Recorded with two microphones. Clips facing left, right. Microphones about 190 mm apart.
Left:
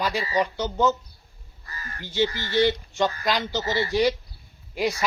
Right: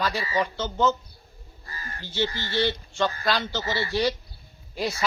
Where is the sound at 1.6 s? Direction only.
30° right (ahead or behind).